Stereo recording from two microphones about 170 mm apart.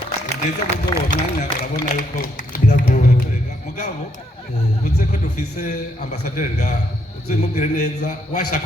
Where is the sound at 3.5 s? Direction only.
45° left (ahead or behind).